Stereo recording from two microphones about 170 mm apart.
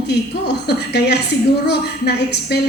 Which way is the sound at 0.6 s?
75° left (ahead or behind).